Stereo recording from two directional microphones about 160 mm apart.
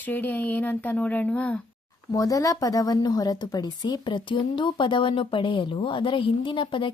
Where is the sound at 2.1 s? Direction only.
20° left (ahead or behind).